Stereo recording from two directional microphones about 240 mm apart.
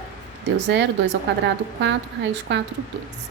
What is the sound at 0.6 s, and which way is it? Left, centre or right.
Speech, right.